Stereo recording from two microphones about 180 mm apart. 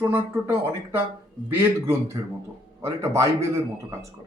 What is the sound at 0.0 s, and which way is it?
Speech, 10° right (ahead or behind).